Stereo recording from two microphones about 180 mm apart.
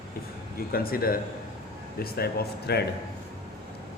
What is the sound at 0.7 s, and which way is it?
Speech, 55° left (ahead or behind).